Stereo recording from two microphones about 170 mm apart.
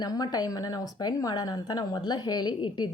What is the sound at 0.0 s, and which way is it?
A woman's voice, 25° left (ahead or behind).